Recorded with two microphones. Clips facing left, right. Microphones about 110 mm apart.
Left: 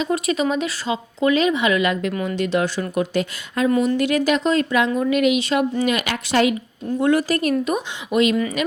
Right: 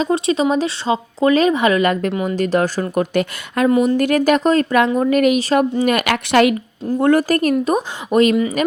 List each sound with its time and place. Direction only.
0.0 s a woman's voice: 30° right (ahead or behind); by 3.7 s 60° right (ahead or behind)
3.8 s speech: 50° right (ahead or behind)
5.8 s a woman's voice: 55° right (ahead or behind)
7.0 s speech: 45° right (ahead or behind)